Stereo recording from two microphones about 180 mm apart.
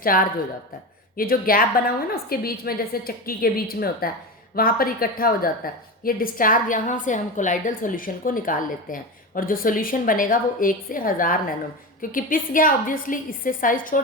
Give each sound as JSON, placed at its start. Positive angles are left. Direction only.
{"t": 0.1, "sound": "a woman's voice", "side_deg": 55}